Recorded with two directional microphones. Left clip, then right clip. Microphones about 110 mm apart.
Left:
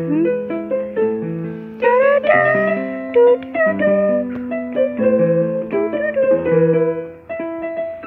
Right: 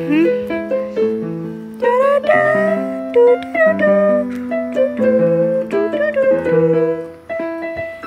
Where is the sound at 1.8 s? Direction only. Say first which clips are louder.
Even; 15° right (ahead or behind).